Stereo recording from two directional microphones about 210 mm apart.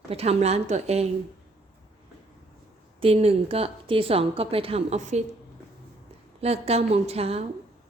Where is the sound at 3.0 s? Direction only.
30° right (ahead or behind).